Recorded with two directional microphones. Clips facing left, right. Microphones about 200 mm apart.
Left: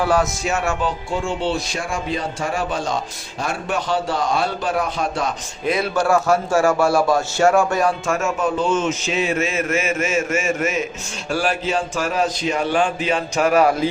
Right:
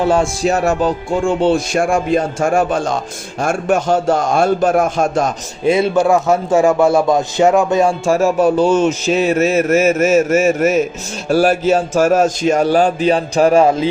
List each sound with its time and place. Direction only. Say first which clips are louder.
0.0 s a man's voice: right 4 dB; 25° right (ahead or behind)
0.4 s speech: right 7 dB; 40° right (ahead or behind)
5.6 s a man's voice: right 7 dB; 25° right (ahead or behind)